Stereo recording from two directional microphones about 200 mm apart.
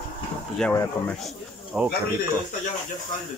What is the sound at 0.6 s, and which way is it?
Speech, 10° left (ahead or behind).